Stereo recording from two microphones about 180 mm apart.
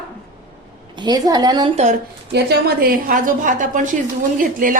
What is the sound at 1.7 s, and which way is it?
Speech, 40° right (ahead or behind).